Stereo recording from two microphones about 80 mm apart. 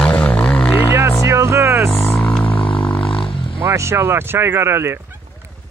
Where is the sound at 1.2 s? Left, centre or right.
Right.